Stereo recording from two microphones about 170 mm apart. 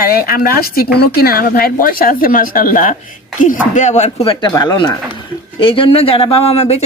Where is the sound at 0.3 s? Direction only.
65° left (ahead or behind).